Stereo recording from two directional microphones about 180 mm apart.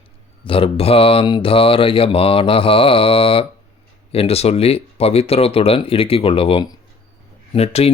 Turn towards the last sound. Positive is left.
turn(degrees=35)  # may be behind; listen again after turning